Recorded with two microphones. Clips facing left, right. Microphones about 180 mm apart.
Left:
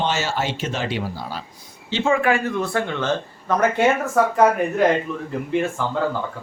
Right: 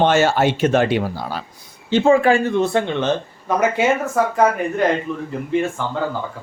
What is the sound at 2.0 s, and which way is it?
Speech, 30° right (ahead or behind).